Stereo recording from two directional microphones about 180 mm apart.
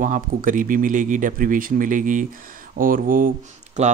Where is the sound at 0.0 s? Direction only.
45° right (ahead or behind).